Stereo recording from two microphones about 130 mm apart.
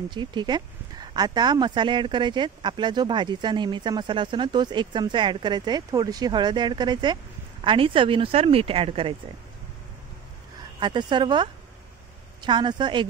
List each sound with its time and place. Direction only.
0.1 s speech: 35° right (ahead or behind)
10.8 s speech: 35° right (ahead or behind)